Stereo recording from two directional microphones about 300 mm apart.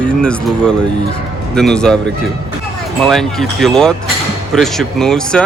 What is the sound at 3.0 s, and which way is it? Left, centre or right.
A man's voice, centre.